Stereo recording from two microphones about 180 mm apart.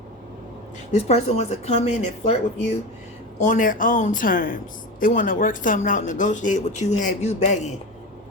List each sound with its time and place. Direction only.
0.9 s a woman's voice: 35° left (ahead or behind)